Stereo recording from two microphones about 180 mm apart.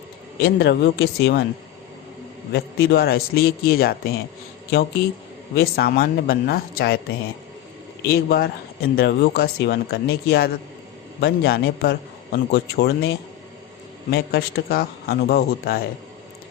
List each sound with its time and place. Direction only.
0.4 s speech: 60° left (ahead or behind)
2.5 s speech: 60° left (ahead or behind)
5.5 s speech: 60° left (ahead or behind)
8.1 s speech: 60° left (ahead or behind)